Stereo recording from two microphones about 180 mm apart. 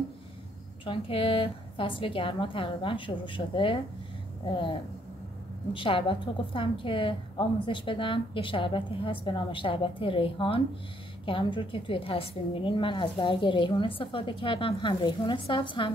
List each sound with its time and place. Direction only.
0.8 s a woman's voice: 30° left (ahead or behind)
5.7 s a woman's voice: 30° left (ahead or behind)